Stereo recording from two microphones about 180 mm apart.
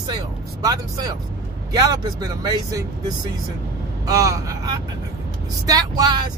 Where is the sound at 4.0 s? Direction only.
20° right (ahead or behind).